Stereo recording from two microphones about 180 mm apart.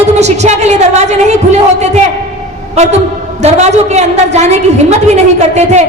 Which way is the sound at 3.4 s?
40° right (ahead or behind).